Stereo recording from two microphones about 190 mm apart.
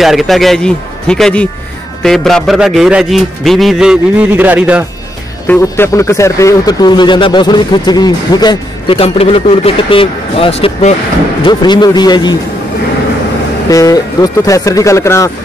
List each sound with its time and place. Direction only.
0.0 s a man's voice: centre (ahead or behind)
5.5 s speech: 15° left (ahead or behind); by 11.0 s 35° left (ahead or behind)
11.4 s speech: 25° left (ahead or behind)
13.7 s speech: 20° left (ahead or behind)